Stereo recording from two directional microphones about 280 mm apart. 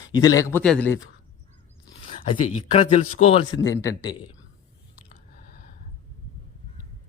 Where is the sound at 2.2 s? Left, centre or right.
Left.